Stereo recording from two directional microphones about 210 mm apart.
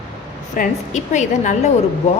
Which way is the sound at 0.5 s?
35° left (ahead or behind).